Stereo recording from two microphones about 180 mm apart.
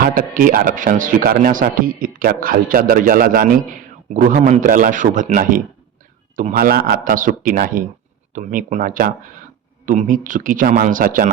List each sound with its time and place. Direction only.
0.0 s speech: 50° right (ahead or behind)